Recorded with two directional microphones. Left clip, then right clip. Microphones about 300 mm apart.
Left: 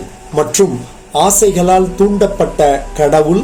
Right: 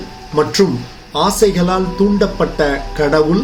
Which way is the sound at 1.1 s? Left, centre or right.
Centre.